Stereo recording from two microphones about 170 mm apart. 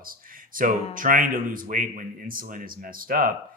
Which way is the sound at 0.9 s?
55° right (ahead or behind).